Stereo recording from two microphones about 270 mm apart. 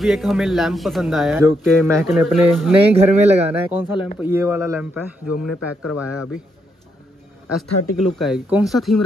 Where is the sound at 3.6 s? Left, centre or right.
Centre.